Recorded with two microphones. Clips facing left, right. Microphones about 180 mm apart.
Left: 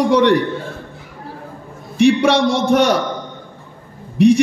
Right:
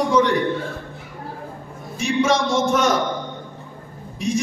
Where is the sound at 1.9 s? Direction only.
65° left (ahead or behind).